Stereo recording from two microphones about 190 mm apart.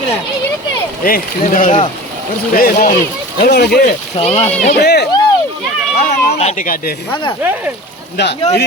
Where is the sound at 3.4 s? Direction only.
60° left (ahead or behind).